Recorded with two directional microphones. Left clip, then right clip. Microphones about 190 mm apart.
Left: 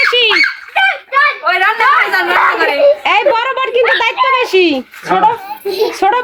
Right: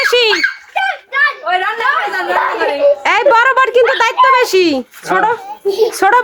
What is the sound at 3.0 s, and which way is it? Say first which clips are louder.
A woman's voice: right 2 dB; 20° right (ahead or behind).